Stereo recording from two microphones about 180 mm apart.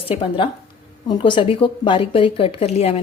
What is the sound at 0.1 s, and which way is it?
Speech, 30° left (ahead or behind).